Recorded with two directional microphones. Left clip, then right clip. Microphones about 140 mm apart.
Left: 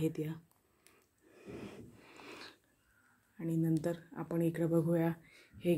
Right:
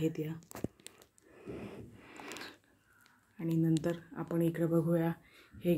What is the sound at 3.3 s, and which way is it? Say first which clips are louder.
Speech: right 2 dB; 5° left (ahead or behind).